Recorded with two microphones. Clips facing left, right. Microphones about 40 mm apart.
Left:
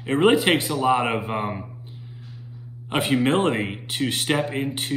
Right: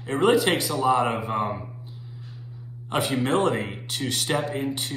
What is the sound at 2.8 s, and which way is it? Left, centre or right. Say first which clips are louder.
Speech: left 3 dB; left.